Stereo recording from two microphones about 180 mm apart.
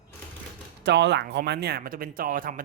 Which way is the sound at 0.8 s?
75° right (ahead or behind).